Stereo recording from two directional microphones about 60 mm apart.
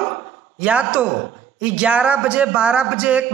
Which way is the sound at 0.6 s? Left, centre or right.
Right.